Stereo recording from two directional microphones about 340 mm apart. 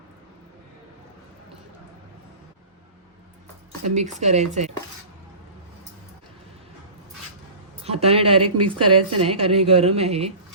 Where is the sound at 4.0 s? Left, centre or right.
Right.